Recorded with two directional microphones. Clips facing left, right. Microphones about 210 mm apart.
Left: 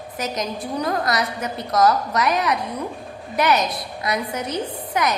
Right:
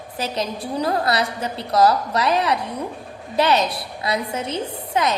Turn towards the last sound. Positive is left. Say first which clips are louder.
# right 1 dB
turn(degrees=-25)  # may be behind; listen again after turning